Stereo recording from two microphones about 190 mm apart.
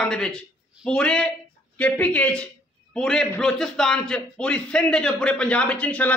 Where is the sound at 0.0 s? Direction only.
5° left (ahead or behind).